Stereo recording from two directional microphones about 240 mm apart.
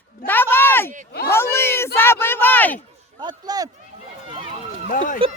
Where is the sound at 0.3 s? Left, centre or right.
Centre.